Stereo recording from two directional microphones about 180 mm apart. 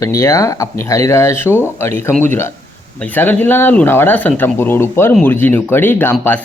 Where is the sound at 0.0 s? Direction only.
15° left (ahead or behind).